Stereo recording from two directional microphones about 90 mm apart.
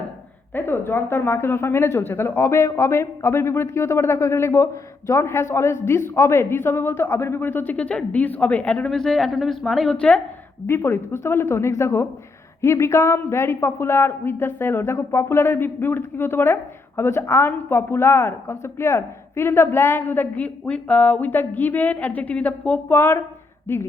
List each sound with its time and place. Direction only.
0.5 s speech: 25° left (ahead or behind)
10.7 s speech: 25° left (ahead or behind)